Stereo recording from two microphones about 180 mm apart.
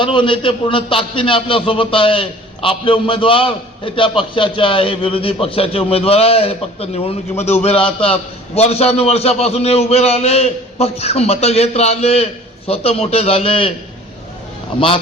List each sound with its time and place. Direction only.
0.0 s a man's voice: 25° left (ahead or behind)